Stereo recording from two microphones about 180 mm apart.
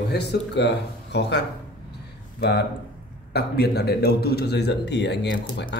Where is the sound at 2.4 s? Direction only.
70° left (ahead or behind).